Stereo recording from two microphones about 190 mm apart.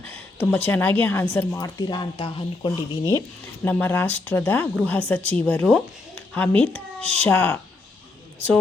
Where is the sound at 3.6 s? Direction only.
10° left (ahead or behind).